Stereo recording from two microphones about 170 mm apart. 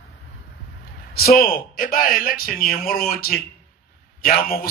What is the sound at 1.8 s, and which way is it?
Speech, 55° left (ahead or behind).